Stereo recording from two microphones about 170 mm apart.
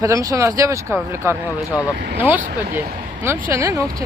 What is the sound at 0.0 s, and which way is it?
Speech, 20° right (ahead or behind).